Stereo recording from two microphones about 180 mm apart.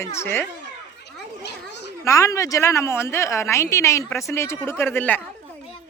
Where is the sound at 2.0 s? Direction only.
15° left (ahead or behind).